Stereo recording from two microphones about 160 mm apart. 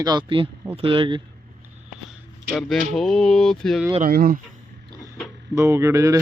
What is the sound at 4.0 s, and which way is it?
Speech, 70° right (ahead or behind).